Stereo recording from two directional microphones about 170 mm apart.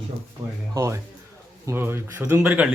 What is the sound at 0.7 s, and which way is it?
Speech, 15° right (ahead or behind).